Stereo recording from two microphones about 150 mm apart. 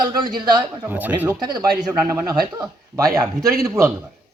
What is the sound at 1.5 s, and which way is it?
Speech, 25° right (ahead or behind).